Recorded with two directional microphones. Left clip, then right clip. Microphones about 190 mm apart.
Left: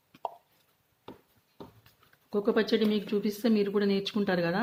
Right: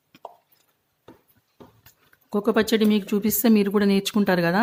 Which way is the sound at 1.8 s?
35° right (ahead or behind).